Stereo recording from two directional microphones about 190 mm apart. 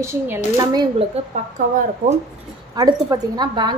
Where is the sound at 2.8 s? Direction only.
20° right (ahead or behind).